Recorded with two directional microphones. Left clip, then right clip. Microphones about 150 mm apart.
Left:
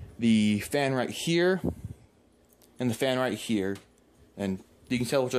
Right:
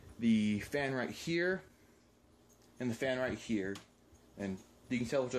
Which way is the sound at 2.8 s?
55° left (ahead or behind).